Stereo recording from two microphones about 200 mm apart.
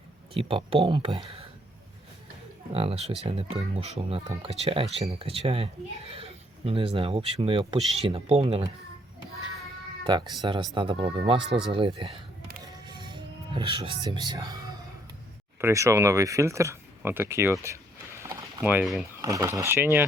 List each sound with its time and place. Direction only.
0.3 s speech: 25° right (ahead or behind)
2.7 s speech: 30° right (ahead or behind)
10.0 s speech: 20° right (ahead or behind)
12.6 s music: 20° right (ahead or behind)
15.6 s speech: 15° right (ahead or behind)
18.2 s a sound: 15° right (ahead or behind)
19.2 s speech: 15° right (ahead or behind)